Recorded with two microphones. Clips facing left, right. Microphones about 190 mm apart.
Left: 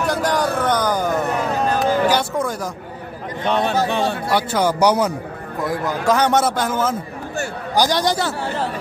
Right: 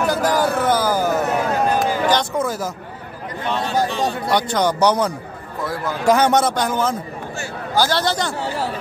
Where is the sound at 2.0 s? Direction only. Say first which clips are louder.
Even; 5° left (ahead or behind).